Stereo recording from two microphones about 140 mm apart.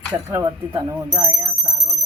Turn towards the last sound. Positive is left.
turn(degrees=-25)  # may be behind; listen again after turning